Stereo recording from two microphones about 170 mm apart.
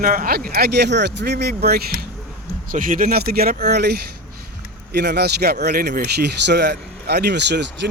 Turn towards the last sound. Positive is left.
turn(degrees=-85)